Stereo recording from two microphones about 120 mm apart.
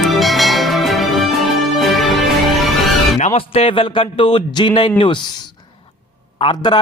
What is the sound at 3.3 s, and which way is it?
A man's voice, 55° left (ahead or behind).